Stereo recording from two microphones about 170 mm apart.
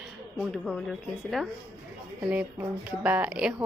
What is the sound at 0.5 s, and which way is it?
Speech, centre (ahead or behind).